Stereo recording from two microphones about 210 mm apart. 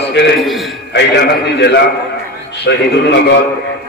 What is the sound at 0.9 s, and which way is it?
A man's voice, 55° left (ahead or behind).